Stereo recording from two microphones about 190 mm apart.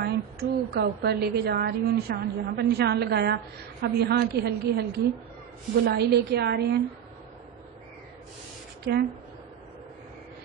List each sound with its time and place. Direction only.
0.0 s a woman's voice: 60° right (ahead or behind)
5.9 s a woman's voice: 60° right (ahead or behind)
8.9 s a woman's voice: 65° right (ahead or behind)